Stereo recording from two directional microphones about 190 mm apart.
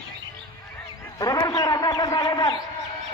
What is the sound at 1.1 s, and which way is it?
A man's voice, 20° left (ahead or behind).